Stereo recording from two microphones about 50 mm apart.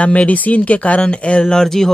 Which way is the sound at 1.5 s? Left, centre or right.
Centre.